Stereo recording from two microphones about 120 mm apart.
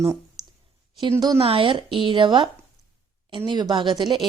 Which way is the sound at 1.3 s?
50° right (ahead or behind).